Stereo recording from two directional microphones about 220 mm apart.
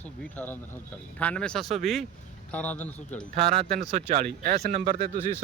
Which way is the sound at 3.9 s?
30° right (ahead or behind).